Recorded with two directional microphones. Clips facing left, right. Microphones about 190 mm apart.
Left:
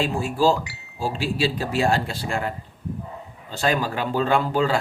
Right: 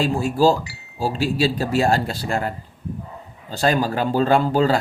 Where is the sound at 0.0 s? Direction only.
40° right (ahead or behind).